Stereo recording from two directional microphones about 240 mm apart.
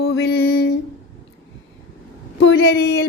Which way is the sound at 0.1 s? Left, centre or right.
Left.